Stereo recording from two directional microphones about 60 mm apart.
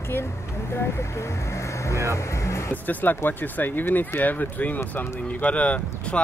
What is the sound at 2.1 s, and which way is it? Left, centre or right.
Music, left.